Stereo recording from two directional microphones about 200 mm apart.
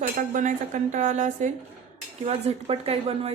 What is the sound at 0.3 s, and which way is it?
Speech, 40° right (ahead or behind).